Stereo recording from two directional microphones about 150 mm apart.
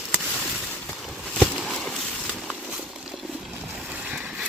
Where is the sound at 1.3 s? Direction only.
10° left (ahead or behind).